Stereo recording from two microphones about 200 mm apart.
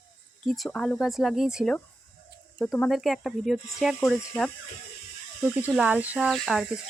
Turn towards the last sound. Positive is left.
turn(degrees=0)  # may be behind; listen again after turning